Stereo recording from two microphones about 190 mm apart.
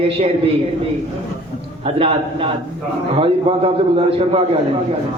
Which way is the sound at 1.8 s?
30° right (ahead or behind).